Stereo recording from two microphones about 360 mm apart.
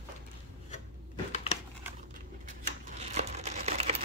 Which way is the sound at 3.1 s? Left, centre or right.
Centre.